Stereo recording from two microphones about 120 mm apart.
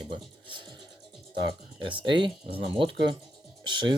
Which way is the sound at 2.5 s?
50° right (ahead or behind).